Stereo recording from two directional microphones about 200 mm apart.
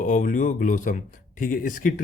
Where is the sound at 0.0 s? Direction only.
40° left (ahead or behind).